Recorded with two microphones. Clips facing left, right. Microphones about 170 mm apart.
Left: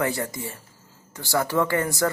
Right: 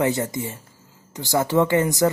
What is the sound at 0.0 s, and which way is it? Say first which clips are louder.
Speech: right 4 dB; 20° right (ahead or behind).